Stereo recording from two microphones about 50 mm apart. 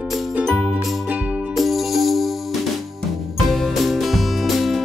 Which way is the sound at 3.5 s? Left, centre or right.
Centre.